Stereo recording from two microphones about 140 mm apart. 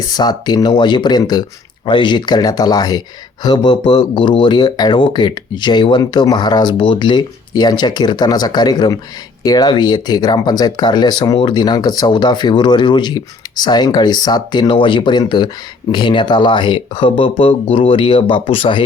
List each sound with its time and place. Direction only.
0.1 s speech: 30° left (ahead or behind)